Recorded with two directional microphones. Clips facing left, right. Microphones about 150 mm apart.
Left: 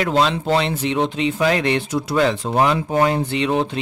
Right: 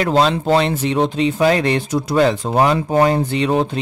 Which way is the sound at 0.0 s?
40° right (ahead or behind).